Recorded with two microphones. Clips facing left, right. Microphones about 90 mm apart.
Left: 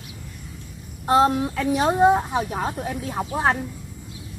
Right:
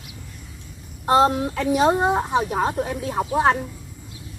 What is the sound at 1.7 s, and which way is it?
Speech, 70° right (ahead or behind).